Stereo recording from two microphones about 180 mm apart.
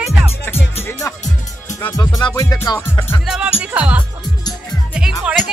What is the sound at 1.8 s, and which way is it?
Speech, 15° left (ahead or behind).